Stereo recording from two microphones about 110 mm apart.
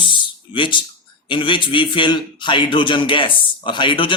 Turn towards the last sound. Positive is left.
turn(degrees=50)  # may be behind; listen again after turning